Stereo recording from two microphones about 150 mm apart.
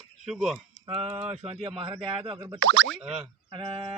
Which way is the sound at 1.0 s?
40° right (ahead or behind).